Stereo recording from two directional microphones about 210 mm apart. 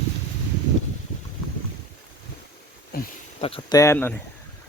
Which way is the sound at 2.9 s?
45° left (ahead or behind).